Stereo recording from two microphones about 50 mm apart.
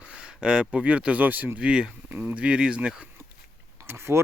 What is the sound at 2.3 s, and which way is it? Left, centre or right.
Speech, right.